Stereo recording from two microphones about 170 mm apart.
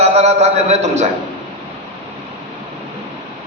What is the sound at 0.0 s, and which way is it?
A man's voice, 40° right (ahead or behind).